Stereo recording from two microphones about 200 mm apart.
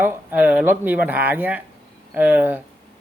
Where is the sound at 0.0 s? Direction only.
10° right (ahead or behind).